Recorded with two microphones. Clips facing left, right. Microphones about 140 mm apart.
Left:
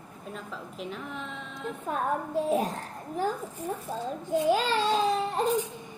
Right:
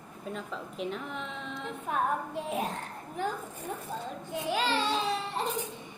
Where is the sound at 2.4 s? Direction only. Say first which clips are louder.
Left 7 dB; 35° left (ahead or behind).